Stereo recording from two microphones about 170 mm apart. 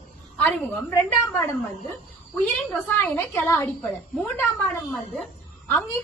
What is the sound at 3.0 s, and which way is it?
Speech, 15° left (ahead or behind).